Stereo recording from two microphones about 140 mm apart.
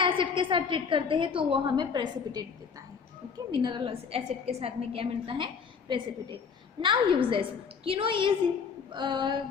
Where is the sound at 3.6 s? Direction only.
35° right (ahead or behind).